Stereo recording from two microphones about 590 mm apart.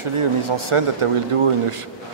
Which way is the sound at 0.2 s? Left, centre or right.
Right.